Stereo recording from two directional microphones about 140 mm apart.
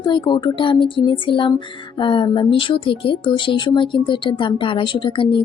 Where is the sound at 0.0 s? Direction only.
30° left (ahead or behind).